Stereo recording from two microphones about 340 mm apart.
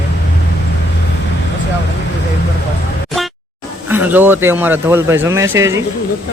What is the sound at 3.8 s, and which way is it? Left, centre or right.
Speech, centre.